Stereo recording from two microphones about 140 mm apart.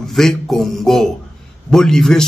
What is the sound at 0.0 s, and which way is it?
A man's voice, 5° left (ahead or behind).